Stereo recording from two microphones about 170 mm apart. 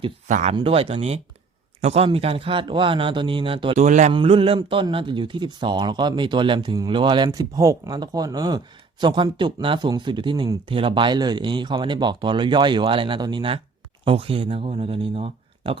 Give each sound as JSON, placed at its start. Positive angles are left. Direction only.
{"t": 0.3, "sound": "a man's voice", "side_deg": -45}
{"t": 0.5, "sound": "speech", "side_deg": -35}
{"t": 3.8, "sound": "a man's voice", "side_deg": -45}
{"t": 4.1, "sound": "a man's voice", "side_deg": -30}